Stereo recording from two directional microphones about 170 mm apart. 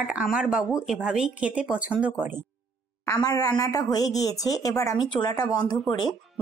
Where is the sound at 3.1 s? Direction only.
20° left (ahead or behind).